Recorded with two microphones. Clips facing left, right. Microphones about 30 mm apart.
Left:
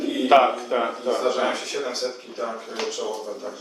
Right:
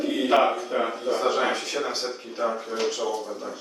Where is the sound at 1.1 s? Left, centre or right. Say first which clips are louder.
Even; centre.